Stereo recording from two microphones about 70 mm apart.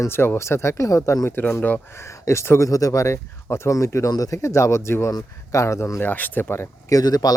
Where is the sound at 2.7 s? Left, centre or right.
Left.